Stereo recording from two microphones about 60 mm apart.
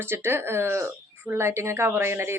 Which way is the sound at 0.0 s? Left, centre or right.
Right.